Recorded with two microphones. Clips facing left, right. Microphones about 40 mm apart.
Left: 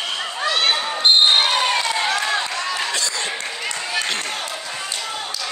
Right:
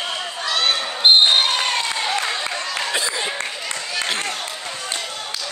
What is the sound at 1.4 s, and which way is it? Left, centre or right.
Basketball bounce, centre.